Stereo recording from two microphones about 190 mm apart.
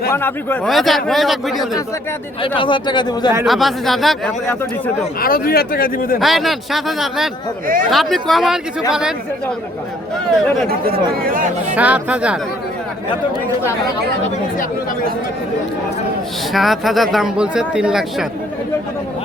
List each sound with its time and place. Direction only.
0.1 s speech: 10° left (ahead or behind)
0.7 s speech: centre (ahead or behind)
2.6 s speech: 25° left (ahead or behind)
3.4 s speech: centre (ahead or behind)
5.2 s speech: 50° left (ahead or behind)
6.1 s speech: centre (ahead or behind)
10.7 s speech: 50° right (ahead or behind)
11.7 s speech: 5° right (ahead or behind)
16.5 s speech: centre (ahead or behind)